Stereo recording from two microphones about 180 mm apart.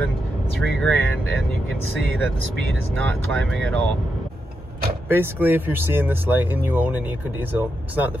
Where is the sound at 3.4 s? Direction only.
5° left (ahead or behind).